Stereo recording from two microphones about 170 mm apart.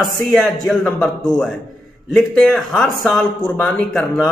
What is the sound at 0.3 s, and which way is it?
A man's voice, centre (ahead or behind).